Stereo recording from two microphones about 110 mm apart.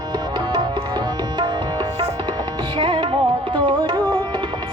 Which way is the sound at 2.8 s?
45° right (ahead or behind).